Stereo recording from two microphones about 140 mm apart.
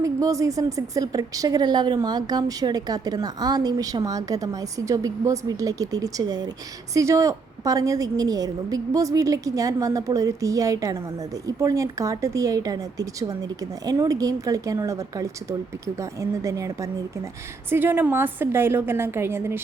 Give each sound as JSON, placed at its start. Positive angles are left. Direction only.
{"t": 0.0, "sound": "a woman's voice", "side_deg": -25}